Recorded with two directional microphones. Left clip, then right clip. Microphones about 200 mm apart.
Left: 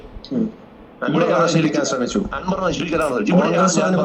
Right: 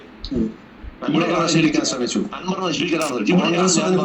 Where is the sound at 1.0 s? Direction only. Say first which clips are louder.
Left 3 dB; 25° left (ahead or behind).